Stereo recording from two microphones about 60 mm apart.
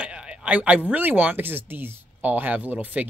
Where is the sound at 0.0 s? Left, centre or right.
Centre.